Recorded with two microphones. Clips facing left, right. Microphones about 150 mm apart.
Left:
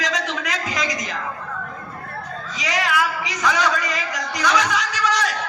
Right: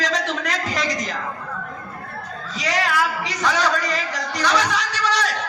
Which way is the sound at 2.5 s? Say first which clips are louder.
Right 1 dB; 35° right (ahead or behind).